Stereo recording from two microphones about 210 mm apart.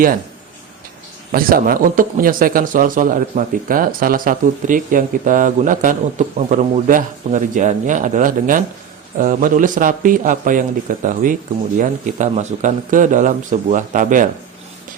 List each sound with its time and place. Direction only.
1.3 s speech: 45° right (ahead or behind)